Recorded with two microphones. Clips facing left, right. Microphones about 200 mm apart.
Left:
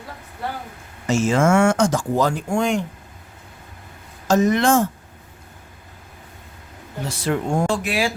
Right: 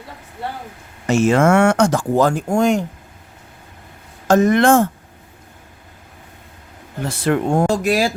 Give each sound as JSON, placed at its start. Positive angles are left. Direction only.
{"t": 1.0, "sound": "speech", "side_deg": -65}
{"t": 4.3, "sound": "speech", "side_deg": -55}
{"t": 7.0, "sound": "speech", "side_deg": -55}
{"t": 7.7, "sound": "speech", "side_deg": -40}